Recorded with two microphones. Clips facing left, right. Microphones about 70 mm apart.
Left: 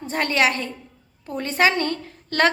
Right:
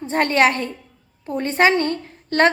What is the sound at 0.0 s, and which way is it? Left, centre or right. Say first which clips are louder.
A woman's voice: right 4 dB; right.